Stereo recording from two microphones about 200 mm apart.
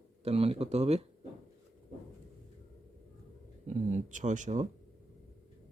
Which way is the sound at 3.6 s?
40° right (ahead or behind).